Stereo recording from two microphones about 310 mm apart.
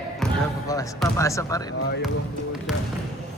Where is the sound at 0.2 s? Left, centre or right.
Centre.